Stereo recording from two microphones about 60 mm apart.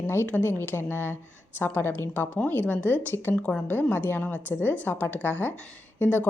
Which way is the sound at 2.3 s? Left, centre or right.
Left.